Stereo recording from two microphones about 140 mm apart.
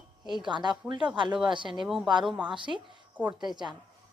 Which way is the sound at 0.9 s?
5° right (ahead or behind).